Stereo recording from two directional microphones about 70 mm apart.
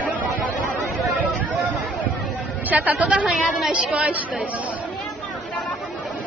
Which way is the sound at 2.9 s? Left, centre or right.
Centre.